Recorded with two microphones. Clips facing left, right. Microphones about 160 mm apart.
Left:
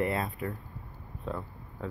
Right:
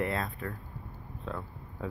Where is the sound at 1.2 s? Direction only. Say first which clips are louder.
Left 2 dB; centre (ahead or behind).